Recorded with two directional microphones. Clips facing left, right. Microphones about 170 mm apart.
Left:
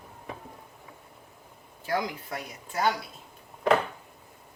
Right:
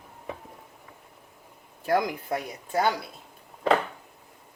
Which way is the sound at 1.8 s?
55° right (ahead or behind).